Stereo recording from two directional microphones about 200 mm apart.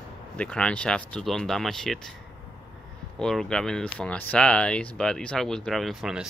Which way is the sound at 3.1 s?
5° left (ahead or behind).